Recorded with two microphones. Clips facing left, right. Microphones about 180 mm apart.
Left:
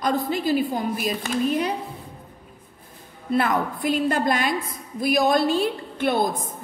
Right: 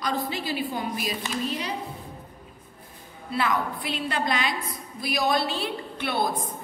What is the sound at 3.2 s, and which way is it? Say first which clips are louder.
A woman's voice: left 4 dB; 50° left (ahead or behind).